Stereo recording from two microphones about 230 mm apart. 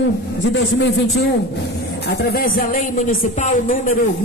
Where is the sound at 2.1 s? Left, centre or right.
Left.